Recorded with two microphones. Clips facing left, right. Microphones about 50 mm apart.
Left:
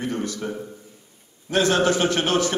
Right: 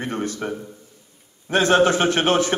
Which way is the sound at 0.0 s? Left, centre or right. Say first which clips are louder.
Right 1 dB; right.